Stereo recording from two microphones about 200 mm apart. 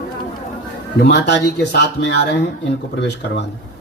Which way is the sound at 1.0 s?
60° left (ahead or behind).